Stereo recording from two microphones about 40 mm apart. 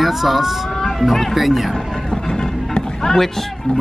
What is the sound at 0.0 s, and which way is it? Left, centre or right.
Speech, centre.